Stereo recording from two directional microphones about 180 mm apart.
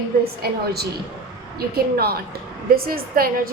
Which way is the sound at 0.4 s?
60° right (ahead or behind).